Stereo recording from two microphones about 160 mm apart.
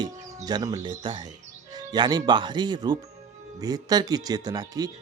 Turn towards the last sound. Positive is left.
turn(degrees=-25)  # may be behind; listen again after turning